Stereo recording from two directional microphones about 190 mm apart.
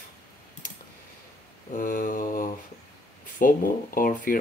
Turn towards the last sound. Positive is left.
turn(degrees=50)  # may be behind; listen again after turning